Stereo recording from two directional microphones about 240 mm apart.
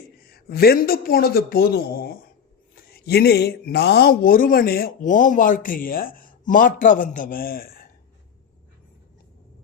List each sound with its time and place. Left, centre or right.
0.2 s a man's voice: left